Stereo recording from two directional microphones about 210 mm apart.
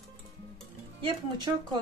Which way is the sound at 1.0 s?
25° right (ahead or behind).